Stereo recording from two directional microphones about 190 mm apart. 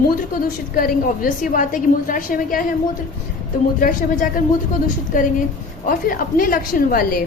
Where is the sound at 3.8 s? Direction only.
45° left (ahead or behind).